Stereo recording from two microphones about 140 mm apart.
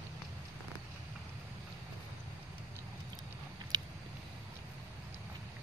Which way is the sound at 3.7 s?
30° right (ahead or behind).